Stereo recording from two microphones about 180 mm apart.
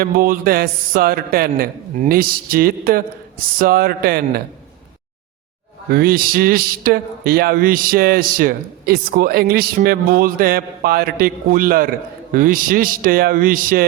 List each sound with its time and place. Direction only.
0.0 s a man's voice: 55° right (ahead or behind)
5.9 s speech: 55° right (ahead or behind)